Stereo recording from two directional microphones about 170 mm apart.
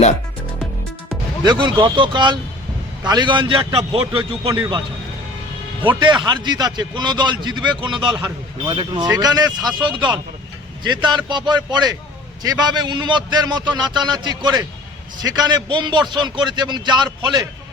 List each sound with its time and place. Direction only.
1.5 s a man's voice: 25° right (ahead or behind)
4.4 s a man's voice: 15° right (ahead or behind)
5.8 s a man's voice: 25° right (ahead or behind)